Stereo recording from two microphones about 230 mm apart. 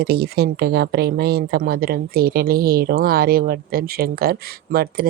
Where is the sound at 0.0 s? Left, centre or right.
Right.